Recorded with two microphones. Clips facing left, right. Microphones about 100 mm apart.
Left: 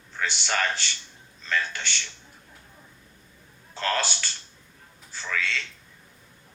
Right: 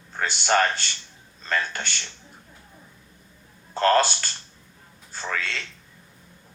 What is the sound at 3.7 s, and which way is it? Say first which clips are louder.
A man's voice: right 8 dB; 45° right (ahead or behind).